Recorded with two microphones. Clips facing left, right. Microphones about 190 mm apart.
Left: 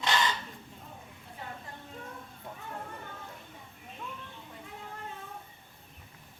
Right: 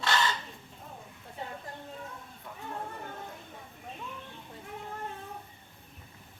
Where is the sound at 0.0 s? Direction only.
15° left (ahead or behind).